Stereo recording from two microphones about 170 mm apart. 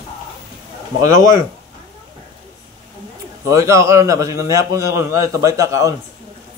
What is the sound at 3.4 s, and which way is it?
A man's voice, 15° right (ahead or behind).